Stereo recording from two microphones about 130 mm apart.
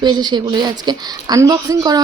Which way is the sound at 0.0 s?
35° right (ahead or behind).